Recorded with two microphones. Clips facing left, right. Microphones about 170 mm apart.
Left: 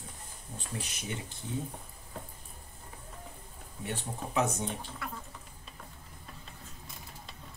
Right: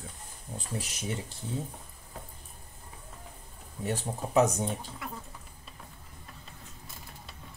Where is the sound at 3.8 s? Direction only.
40° right (ahead or behind).